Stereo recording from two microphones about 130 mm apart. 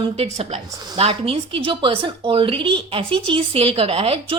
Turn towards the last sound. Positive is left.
turn(degrees=-50)  # may be behind; listen again after turning